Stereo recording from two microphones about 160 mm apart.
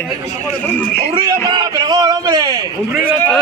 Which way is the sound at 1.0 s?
30° right (ahead or behind).